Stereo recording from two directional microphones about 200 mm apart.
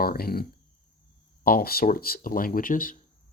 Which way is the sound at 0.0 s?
50° left (ahead or behind).